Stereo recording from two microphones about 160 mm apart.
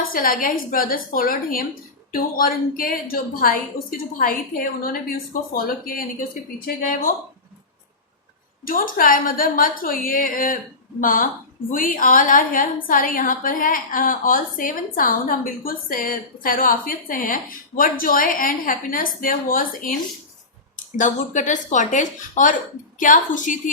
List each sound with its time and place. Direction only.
0.1 s a woman's voice: 60° left (ahead or behind)
8.6 s a woman's voice: 65° left (ahead or behind)